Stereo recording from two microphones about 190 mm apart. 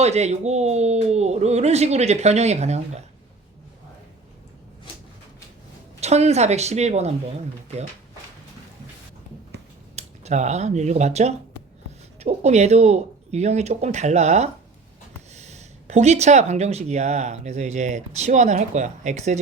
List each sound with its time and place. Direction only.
0.0 s speech: 35° right (ahead or behind)
6.0 s speech: 35° right (ahead or behind)
9.9 s speech: 35° right (ahead or behind)